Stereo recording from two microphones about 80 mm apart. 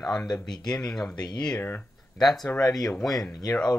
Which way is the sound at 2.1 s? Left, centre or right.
Centre.